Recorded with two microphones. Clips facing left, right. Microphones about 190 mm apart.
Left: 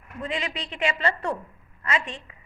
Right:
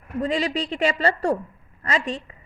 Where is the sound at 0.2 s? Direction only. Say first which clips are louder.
Right 8 dB; 35° right (ahead or behind).